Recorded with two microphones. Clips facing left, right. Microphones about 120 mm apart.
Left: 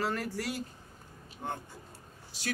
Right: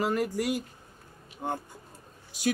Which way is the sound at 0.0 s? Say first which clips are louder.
Right 6 dB; 15° right (ahead or behind).